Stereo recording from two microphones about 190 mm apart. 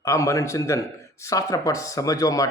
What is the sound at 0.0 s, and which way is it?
A man's voice, 15° left (ahead or behind).